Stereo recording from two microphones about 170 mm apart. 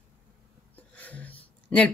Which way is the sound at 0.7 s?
10° left (ahead or behind).